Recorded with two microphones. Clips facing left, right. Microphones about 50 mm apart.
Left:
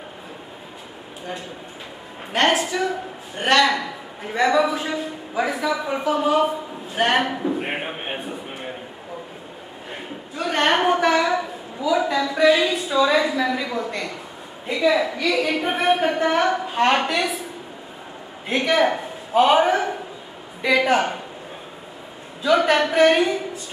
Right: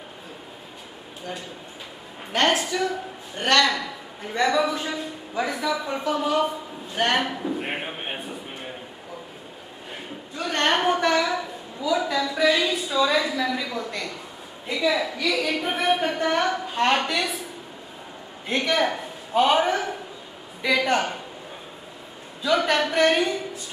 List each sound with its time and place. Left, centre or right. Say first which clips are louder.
2.3 s a man's voice: left 2 dB; centre
7.0 s a sound: left 3 dB; centre
10.3 s a sound: left 3 dB; centre
14.7 s a woman's voice: left 4 dB; centre
18.5 s a man's voice: left 4 dB; centre
22.4 s a woman's voice: left 4 dB; centre